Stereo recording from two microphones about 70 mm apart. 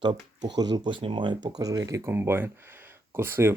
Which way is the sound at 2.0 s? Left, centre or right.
Right.